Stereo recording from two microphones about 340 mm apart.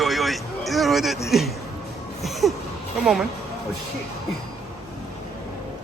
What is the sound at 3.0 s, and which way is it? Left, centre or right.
Speech, centre.